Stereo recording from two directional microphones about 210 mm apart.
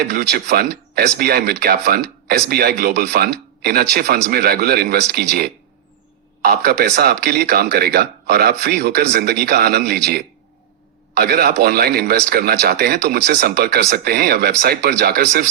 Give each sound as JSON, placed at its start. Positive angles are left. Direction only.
{"t": 0.0, "sound": "speech", "side_deg": -50}
{"t": 6.4, "sound": "speech", "side_deg": -45}